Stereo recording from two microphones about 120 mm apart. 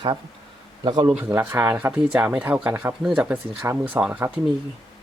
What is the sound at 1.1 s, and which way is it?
Speech, 15° right (ahead or behind).